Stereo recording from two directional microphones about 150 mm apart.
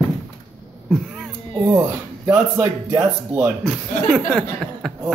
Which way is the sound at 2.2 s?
15° right (ahead or behind).